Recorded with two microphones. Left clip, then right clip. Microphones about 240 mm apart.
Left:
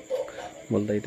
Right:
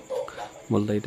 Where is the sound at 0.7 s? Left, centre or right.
Right.